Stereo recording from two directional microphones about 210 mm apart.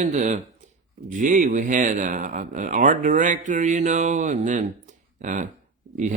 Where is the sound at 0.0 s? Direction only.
35° right (ahead or behind).